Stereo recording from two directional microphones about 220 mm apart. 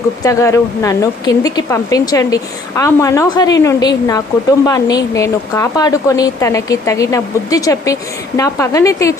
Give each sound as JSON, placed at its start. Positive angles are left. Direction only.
{"t": 0.2, "sound": "a woman's voice", "side_deg": 15}